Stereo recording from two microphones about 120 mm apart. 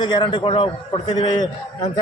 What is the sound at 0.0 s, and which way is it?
Speech, 40° left (ahead or behind).